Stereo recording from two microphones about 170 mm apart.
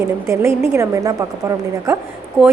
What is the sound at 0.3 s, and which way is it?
A woman's voice, 15° right (ahead or behind).